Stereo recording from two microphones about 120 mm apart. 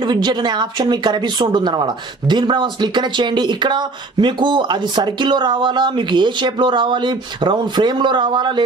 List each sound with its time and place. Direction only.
0.0 s speech: 40° right (ahead or behind)